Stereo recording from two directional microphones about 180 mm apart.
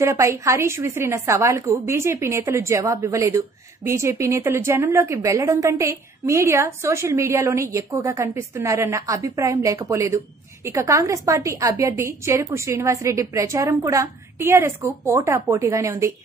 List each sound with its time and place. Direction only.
0.0 s a woman's voice: 15° right (ahead or behind)